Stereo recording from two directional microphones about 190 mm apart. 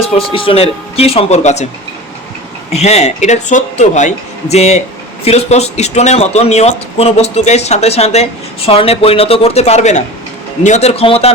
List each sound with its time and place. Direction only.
0.3 s speech: 30° left (ahead or behind)
2.7 s speech: 35° left (ahead or behind)